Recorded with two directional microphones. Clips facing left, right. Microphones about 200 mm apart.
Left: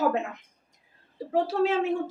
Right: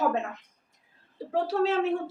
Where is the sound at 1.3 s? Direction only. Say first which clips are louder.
Left 1 dB; 10° left (ahead or behind).